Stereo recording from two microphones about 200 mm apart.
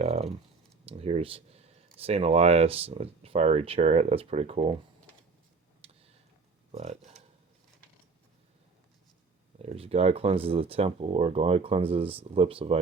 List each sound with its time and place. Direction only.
0.0 s speech: 30° right (ahead or behind)
5.8 s tick: 30° right (ahead or behind)
6.7 s speech: 30° right (ahead or behind)
9.6 s speech: 30° right (ahead or behind)